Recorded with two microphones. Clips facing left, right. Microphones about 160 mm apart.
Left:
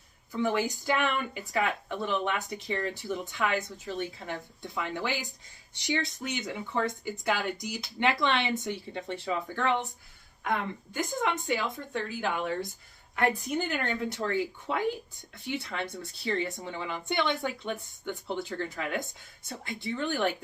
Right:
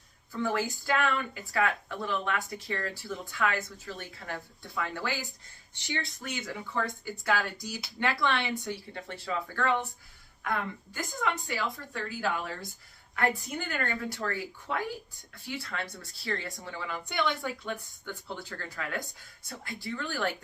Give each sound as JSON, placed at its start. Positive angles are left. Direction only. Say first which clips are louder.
{"t": 0.3, "sound": "speech", "louder": "left 2 dB", "side_deg": 15}